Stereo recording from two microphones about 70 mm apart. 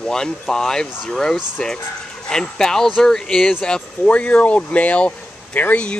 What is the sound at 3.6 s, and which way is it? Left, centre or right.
Speech, centre.